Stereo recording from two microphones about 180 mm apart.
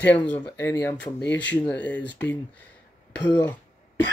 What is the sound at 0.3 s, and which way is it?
Speech, 10° left (ahead or behind).